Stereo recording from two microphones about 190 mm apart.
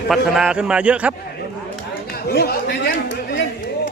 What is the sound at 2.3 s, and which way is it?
Speech, 55° left (ahead or behind).